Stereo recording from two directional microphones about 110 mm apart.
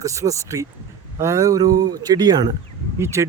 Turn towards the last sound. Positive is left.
turn(degrees=-25)  # may be behind; listen again after turning